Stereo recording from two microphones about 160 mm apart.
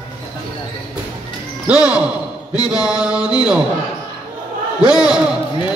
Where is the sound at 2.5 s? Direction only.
5° right (ahead or behind).